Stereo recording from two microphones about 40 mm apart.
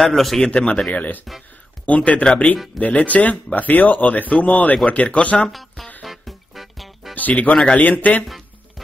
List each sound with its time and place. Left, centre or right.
0.0 s a man's voice: centre
0.4 s speech: left
5.5 s music: centre
7.2 s speech: left